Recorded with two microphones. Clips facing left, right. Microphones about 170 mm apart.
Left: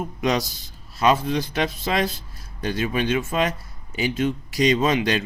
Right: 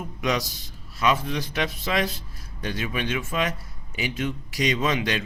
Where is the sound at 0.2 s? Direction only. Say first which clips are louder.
Left 3 dB; 35° left (ahead or behind).